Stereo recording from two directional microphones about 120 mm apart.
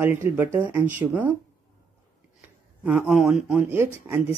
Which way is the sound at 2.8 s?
5° right (ahead or behind).